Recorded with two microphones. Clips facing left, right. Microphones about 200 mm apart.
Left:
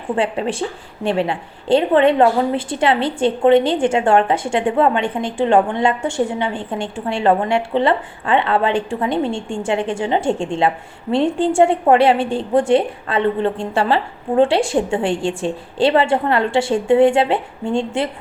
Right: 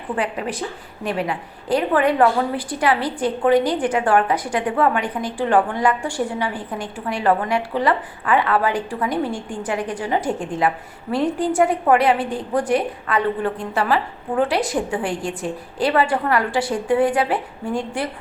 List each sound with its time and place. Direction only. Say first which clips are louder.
0.2 s a woman's voice: left 5 dB; 30° left (ahead or behind)